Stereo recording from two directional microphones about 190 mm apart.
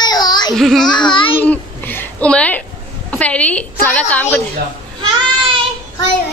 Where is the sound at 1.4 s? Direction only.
10° left (ahead or behind).